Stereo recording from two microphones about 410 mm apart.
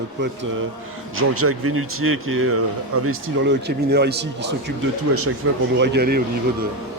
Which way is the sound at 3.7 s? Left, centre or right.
Right.